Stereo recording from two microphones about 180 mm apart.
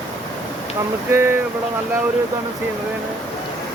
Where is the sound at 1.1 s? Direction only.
15° right (ahead or behind).